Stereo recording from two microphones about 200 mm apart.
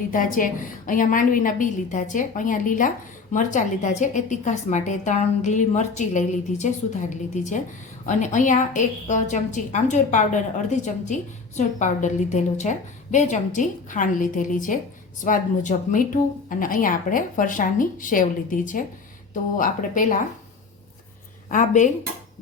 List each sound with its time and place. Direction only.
0.1 s a woman's voice: 45° left (ahead or behind)
21.5 s a woman's voice: 40° left (ahead or behind)